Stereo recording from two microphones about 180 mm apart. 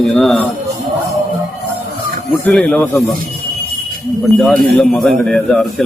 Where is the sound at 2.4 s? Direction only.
10° left (ahead or behind).